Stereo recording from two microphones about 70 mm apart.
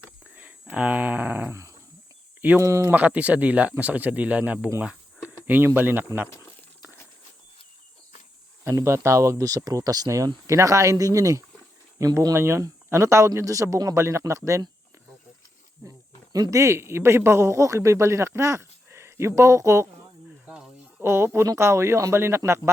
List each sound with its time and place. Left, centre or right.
0.3 s speech: centre
2.6 s speech: right
2.9 s speech: right
8.6 s speech: right
10.2 s speech: right
12.3 s speech: right
13.9 s speech: right
15.9 s speech: right
20.5 s a sound: centre
21.0 s speech: right
21.4 s speech: right